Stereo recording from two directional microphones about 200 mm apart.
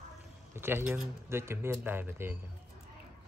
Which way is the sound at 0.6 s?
10° right (ahead or behind).